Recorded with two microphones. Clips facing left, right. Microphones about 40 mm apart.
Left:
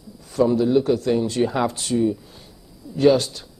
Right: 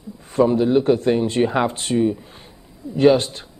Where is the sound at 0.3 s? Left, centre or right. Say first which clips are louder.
Right 2 dB; right.